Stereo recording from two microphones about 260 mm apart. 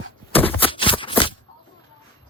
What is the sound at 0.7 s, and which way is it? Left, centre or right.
Shuffling cards, centre.